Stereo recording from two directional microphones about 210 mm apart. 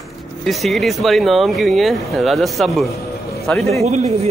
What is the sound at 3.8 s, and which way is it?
Speech, 30° right (ahead or behind).